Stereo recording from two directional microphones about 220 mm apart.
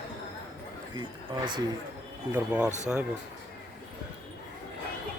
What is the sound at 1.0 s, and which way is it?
Speech, 20° right (ahead or behind).